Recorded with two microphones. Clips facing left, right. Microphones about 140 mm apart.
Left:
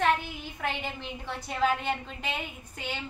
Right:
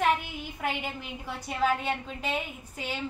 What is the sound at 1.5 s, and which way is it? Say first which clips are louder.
Speech: even; 5° right (ahead or behind).